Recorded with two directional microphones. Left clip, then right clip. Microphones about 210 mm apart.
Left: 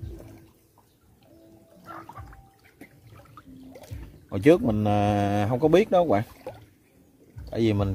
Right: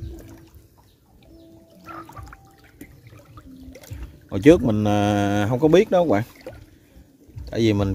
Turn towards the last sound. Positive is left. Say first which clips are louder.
# right 4 dB
turn(degrees=-20)  # may be behind; listen again after turning